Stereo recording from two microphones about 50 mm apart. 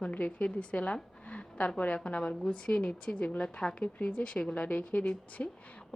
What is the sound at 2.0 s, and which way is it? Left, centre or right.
A woman's voice, left.